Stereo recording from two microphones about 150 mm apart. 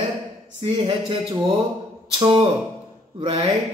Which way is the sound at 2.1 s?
30° right (ahead or behind).